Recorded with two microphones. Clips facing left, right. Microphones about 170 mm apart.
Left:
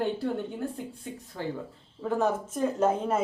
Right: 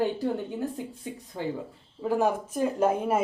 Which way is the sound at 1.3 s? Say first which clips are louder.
Right 2 dB; 20° right (ahead or behind).